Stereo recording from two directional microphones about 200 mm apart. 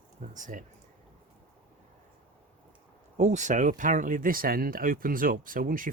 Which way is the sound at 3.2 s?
35° right (ahead or behind).